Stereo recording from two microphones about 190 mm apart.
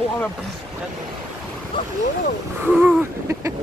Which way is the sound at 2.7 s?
10° right (ahead or behind).